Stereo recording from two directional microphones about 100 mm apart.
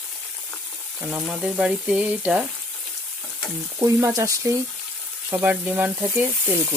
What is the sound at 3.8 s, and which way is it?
Frying, 30° right (ahead or behind).